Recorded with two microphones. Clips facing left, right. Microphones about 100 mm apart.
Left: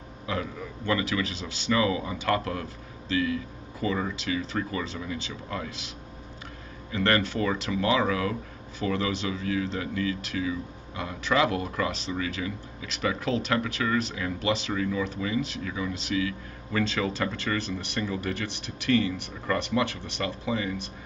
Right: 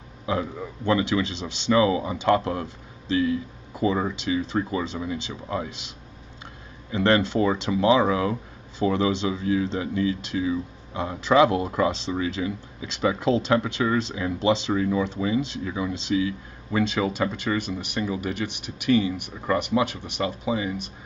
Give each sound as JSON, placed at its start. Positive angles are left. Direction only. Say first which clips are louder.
{"t": 0.3, "sound": "speech", "louder": "right 5 dB", "side_deg": -25}
{"t": 6.9, "sound": "speech", "louder": "right 4 dB", "side_deg": -20}